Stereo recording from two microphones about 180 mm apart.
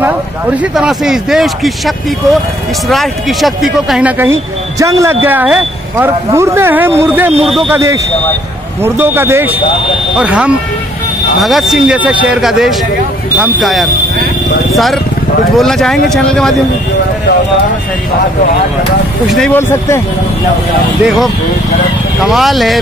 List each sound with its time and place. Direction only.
0.6 s speech: 5° right (ahead or behind)
7.4 s speech: centre (ahead or behind)
7.7 s speech: 15° right (ahead or behind); by 16.5 s 5° left (ahead or behind)
19.3 s speech: 5° left (ahead or behind)
22.2 s speech: centre (ahead or behind)